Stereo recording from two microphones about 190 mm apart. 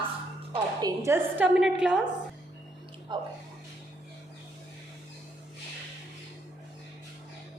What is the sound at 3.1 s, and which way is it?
Speech, 25° right (ahead or behind).